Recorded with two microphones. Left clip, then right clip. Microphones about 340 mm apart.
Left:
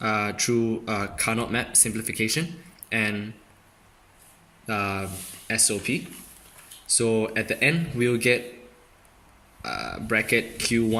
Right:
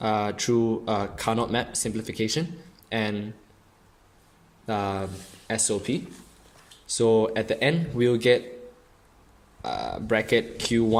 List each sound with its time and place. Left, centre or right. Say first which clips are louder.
0.0 s speech: even; centre
4.6 s speech: even; centre
6.9 s speech: right 3 dB; centre
9.6 s speech: right 2 dB; centre